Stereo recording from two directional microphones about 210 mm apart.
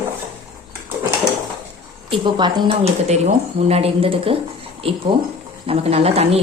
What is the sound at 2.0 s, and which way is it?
Speech, 25° right (ahead or behind).